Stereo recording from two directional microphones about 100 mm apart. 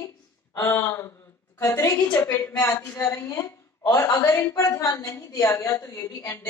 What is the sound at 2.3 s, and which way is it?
A woman's voice, 25° left (ahead or behind).